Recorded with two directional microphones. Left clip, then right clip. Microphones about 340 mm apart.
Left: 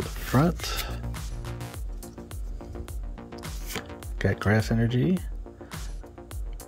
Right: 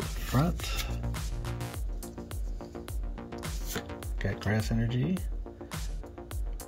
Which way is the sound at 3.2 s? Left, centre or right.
Centre.